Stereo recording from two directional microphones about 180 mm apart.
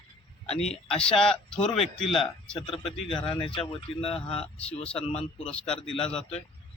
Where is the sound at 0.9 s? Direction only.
5° left (ahead or behind).